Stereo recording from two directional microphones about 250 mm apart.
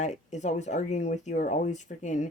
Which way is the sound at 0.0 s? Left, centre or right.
Left.